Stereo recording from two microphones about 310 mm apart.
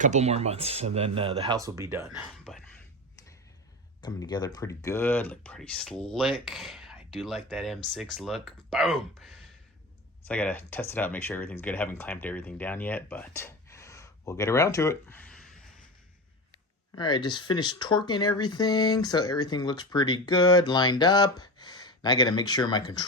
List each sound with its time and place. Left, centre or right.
0.0 s speech: right; by 2.6 s centre
4.0 s speech: centre
16.5 s speech: centre